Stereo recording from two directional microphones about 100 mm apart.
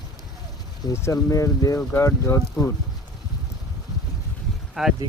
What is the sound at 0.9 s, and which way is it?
Speech, 30° left (ahead or behind).